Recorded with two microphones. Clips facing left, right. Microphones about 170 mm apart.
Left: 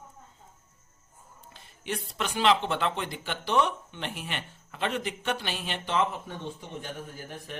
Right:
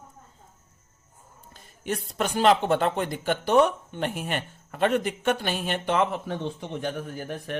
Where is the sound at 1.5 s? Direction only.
45° right (ahead or behind).